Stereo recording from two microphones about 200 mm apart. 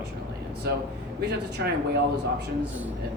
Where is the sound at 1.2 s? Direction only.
55° right (ahead or behind).